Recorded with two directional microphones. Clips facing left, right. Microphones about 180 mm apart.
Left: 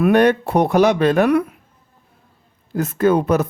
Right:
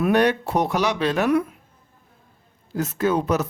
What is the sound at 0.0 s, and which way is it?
Speech, 55° left (ahead or behind).